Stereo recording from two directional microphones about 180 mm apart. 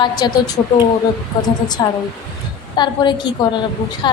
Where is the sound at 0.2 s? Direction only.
25° left (ahead or behind).